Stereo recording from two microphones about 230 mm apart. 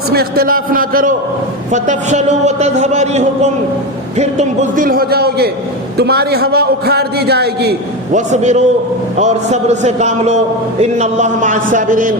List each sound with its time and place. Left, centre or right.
0.1 s a man's voice: right
8.3 s a man's voice: right